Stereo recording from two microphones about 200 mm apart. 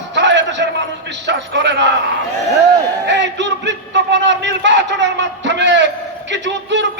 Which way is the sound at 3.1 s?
60° right (ahead or behind).